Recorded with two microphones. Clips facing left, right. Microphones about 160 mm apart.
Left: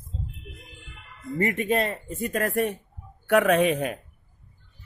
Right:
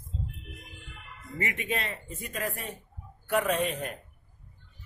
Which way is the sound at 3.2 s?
75° left (ahead or behind).